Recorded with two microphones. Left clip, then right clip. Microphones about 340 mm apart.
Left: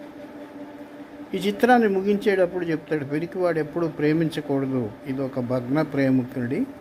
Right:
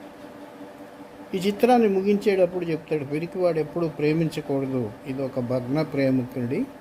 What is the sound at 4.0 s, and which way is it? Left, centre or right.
Speech, centre.